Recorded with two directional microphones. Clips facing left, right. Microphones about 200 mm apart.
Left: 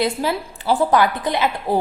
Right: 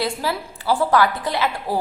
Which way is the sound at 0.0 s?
20° left (ahead or behind).